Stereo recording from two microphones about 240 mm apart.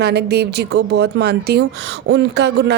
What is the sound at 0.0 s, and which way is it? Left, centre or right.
Speech, right.